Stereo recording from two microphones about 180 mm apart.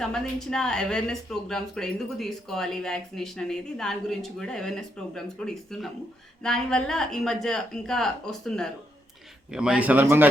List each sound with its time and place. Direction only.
0.0 s speech: 5° left (ahead or behind)